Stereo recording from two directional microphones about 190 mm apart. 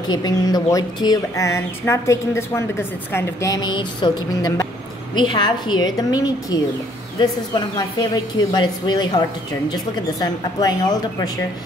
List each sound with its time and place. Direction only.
0.1 s a woman's voice: 20° left (ahead or behind)
10.2 s a woman's voice: 20° left (ahead or behind)